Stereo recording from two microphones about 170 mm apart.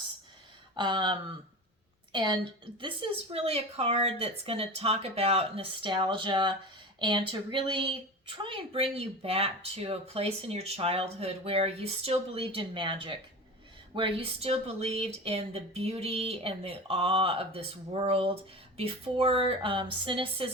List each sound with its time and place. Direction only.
0.8 s speech: 25° right (ahead or behind)